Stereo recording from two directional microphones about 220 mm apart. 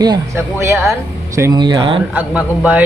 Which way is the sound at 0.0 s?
15° right (ahead or behind).